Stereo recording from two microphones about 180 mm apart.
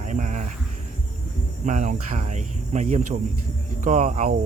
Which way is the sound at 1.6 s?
45° right (ahead or behind).